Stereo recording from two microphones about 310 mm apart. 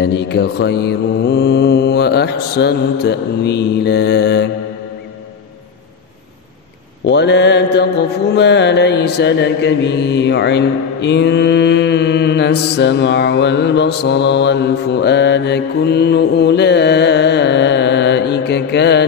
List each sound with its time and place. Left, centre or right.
0.0 s mantra: left
7.1 s mantra: left